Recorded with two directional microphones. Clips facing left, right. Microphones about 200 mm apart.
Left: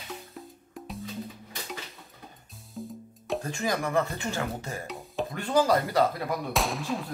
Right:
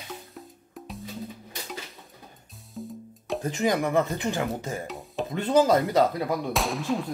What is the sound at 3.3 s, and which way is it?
Speech, 20° right (ahead or behind).